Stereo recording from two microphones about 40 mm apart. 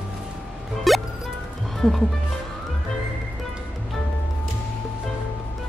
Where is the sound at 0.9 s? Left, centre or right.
Centre.